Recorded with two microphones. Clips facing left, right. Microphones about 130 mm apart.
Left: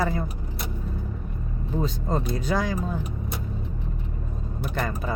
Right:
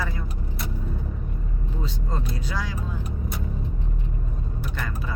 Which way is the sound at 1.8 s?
50° left (ahead or behind).